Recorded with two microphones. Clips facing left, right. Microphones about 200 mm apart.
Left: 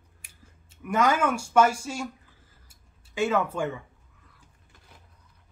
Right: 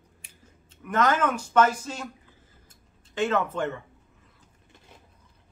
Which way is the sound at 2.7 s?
10° left (ahead or behind).